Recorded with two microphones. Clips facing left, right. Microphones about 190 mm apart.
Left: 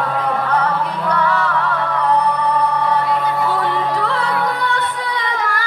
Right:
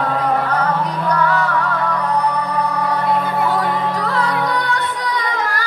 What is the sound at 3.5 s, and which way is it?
Music, 40° right (ahead or behind).